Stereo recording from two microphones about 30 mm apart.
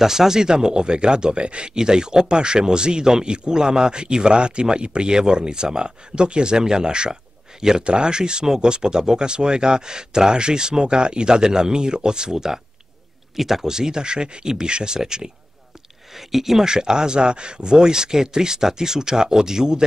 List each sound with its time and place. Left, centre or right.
0.0 s speech: centre
13.4 s speech: centre
16.2 s speech: centre
16.6 s speech: right